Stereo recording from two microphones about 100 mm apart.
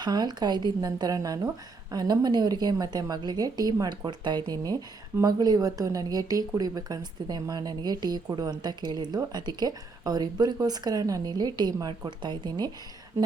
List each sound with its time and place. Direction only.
0.0 s a woman's voice: 45° right (ahead or behind)
13.2 s speech: 25° right (ahead or behind)